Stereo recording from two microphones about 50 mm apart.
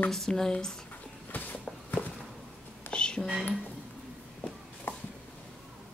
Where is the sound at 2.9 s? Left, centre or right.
Centre.